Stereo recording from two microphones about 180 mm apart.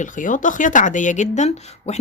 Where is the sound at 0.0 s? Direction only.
45° left (ahead or behind).